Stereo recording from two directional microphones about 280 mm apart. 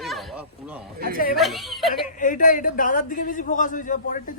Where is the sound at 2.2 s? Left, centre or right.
Left.